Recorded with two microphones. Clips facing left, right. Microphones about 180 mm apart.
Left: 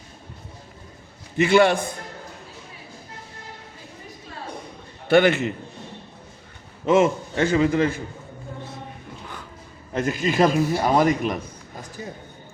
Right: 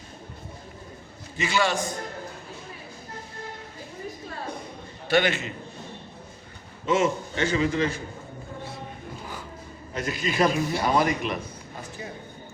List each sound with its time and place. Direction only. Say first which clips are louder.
1.4 s a man's voice: left 8 dB; 60° left (ahead or behind)
5.0 s a man's voice: left 6 dB; 55° left (ahead or behind)
6.8 s speech: left 5 dB; 55° left (ahead or behind)
9.9 s speech: left 6 dB; 50° left (ahead or behind)